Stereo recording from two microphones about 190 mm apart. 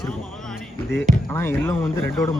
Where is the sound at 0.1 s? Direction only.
Centre (ahead or behind).